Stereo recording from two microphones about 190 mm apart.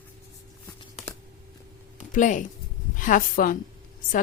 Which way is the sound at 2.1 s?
40° left (ahead or behind).